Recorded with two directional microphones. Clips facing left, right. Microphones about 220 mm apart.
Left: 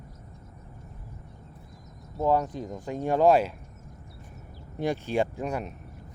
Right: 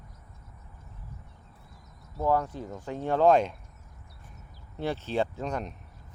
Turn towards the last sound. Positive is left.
turn(degrees=10)  # may be behind; listen again after turning